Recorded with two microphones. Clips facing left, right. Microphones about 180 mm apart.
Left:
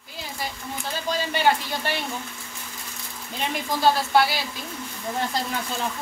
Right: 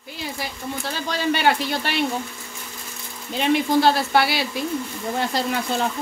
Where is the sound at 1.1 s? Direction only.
75° right (ahead or behind).